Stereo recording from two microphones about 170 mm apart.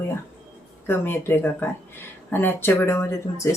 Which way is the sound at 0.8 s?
15° left (ahead or behind).